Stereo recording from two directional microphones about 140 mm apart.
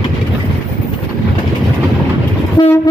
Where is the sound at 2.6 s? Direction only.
30° left (ahead or behind).